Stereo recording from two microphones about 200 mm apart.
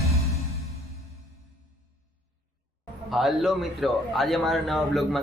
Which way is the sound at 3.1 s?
Centre (ahead or behind).